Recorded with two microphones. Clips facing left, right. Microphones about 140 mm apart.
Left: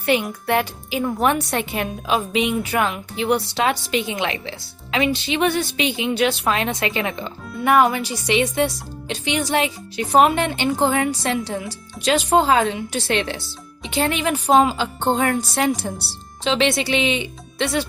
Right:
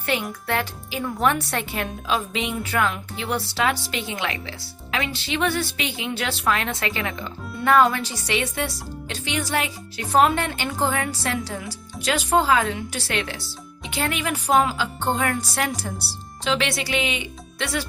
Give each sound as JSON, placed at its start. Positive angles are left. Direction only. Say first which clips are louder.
{"t": 0.0, "sound": "a woman's voice", "louder": "left 6 dB", "side_deg": 15}